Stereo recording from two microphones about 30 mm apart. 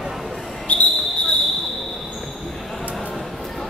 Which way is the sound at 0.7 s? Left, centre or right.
Left.